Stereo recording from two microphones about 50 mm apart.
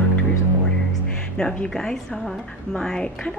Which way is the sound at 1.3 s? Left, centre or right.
Centre.